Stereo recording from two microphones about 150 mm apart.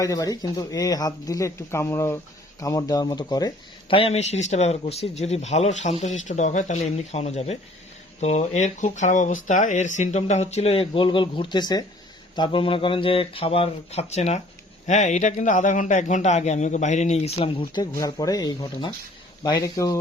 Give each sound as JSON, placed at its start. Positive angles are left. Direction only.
{"t": 0.0, "sound": "speech", "side_deg": 25}
{"t": 17.9, "sound": "speech", "side_deg": 25}